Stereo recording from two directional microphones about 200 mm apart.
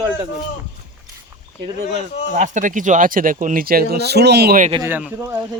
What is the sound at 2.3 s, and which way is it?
Speech, 40° right (ahead or behind).